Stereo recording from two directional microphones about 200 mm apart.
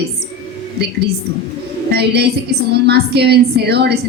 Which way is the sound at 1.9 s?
55° right (ahead or behind).